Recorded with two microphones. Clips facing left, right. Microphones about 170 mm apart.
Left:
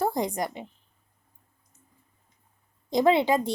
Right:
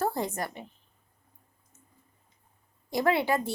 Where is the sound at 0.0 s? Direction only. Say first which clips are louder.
Left 3 dB; 15° left (ahead or behind).